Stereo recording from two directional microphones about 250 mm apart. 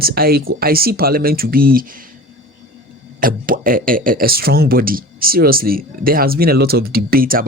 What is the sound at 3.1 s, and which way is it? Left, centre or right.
Speech, right.